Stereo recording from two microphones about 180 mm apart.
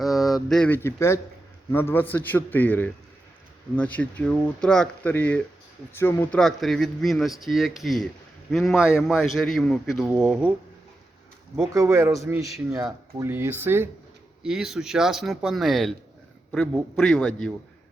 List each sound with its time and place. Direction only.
0.0 s a sound: centre (ahead or behind)
1.7 s speech: 10° left (ahead or behind)
11.5 s speech: 15° right (ahead or behind); by 17.5 s 5° left (ahead or behind)